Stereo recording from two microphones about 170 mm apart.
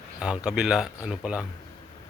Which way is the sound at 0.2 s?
5° right (ahead or behind).